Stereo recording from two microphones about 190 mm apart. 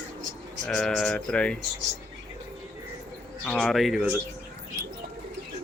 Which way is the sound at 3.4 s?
5° left (ahead or behind).